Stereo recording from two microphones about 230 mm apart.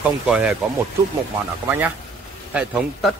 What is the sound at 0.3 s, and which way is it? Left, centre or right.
Speech, centre.